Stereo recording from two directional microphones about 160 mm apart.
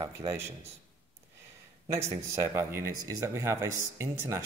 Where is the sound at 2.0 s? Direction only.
15° right (ahead or behind).